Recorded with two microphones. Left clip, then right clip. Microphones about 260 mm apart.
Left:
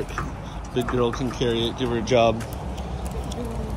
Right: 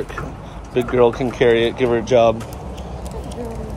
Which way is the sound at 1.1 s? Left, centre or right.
Centre.